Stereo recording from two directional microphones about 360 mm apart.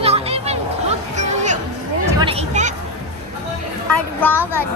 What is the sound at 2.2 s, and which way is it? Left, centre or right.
Speech, centre.